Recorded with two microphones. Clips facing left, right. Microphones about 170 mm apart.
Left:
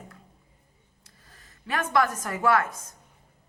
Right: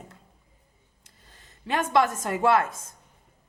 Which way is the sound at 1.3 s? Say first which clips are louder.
Right 3 dB; 25° right (ahead or behind).